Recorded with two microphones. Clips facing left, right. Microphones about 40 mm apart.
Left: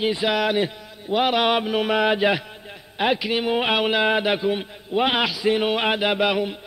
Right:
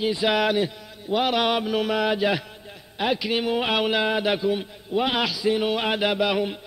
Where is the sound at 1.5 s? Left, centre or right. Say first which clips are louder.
Left 2 dB; left.